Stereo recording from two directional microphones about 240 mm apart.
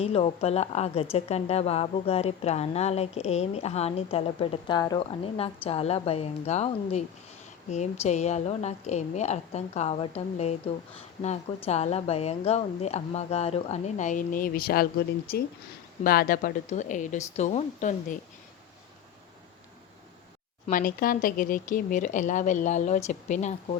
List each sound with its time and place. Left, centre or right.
0.0 s a woman's voice: left
20.7 s speech: left